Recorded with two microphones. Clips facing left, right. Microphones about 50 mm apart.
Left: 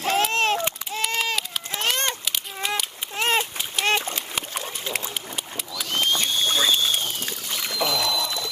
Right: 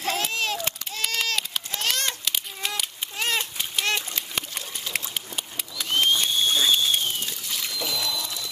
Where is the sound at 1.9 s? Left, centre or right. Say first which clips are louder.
Left 3 dB; left.